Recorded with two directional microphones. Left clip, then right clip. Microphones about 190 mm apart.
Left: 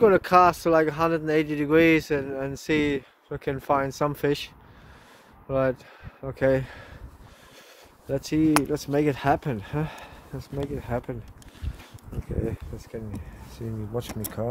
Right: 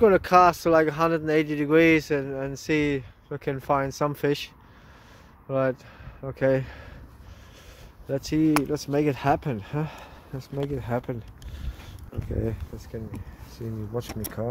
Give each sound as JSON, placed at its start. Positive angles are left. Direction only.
{"t": 0.0, "sound": "a man's voice", "side_deg": -15}
{"t": 5.5, "sound": "a man's voice", "side_deg": -20}
{"t": 8.1, "sound": "a man's voice", "side_deg": -25}
{"t": 10.8, "sound": "speech", "side_deg": -45}
{"t": 13.9, "sound": "speech", "side_deg": -10}